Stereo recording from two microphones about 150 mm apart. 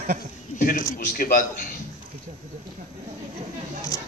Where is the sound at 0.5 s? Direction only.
60° left (ahead or behind).